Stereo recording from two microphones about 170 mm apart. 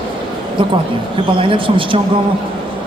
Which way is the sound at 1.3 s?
30° right (ahead or behind).